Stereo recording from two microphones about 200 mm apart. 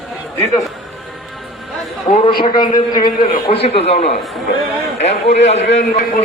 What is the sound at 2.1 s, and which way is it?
Speech, 30° left (ahead or behind).